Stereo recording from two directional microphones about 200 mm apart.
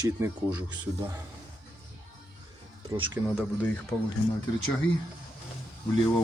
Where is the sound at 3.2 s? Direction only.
5° right (ahead or behind).